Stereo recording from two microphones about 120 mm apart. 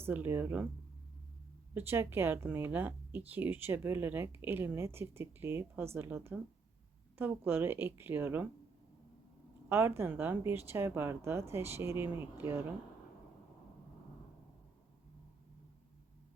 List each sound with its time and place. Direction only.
0.0 s speech: 15° right (ahead or behind)
1.7 s speech: 20° right (ahead or behind)
9.6 s a woman's voice: 20° right (ahead or behind)